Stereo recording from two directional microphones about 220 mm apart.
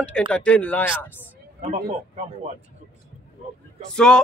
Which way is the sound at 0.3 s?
5° left (ahead or behind).